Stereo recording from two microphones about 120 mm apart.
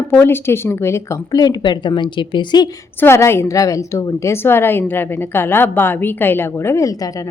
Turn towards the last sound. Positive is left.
turn(degrees=25)  # may be behind; listen again after turning